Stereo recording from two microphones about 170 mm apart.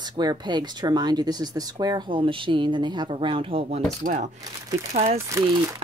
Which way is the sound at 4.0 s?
45° right (ahead or behind).